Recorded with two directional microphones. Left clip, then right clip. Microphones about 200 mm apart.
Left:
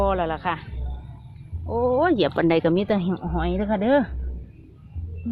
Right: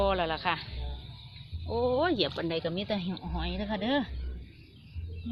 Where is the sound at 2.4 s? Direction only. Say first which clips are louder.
Left 12 dB; 45° left (ahead or behind).